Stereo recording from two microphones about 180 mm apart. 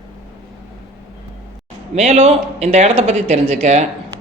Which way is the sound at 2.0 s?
35° right (ahead or behind).